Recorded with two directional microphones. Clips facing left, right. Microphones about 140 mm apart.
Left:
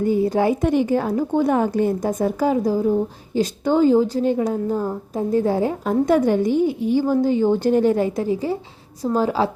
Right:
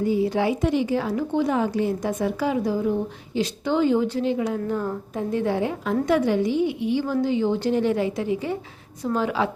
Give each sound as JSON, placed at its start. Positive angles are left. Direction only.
{"t": 0.0, "sound": "a woman's voice", "side_deg": 50}
{"t": 4.5, "sound": "a woman's voice", "side_deg": 25}
{"t": 5.1, "sound": "a woman's voice", "side_deg": 40}